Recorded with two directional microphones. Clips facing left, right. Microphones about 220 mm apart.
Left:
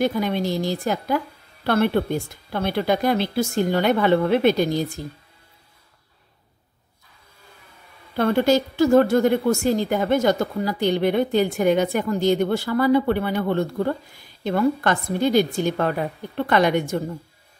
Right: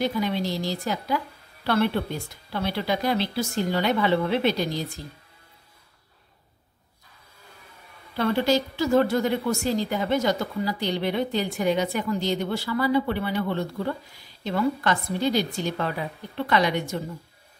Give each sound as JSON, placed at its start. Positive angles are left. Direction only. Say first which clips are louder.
{"t": 0.0, "sound": "a woman's voice", "louder": "left 4 dB", "side_deg": 50}
{"t": 8.2, "sound": "a woman's voice", "louder": "left 4 dB", "side_deg": 50}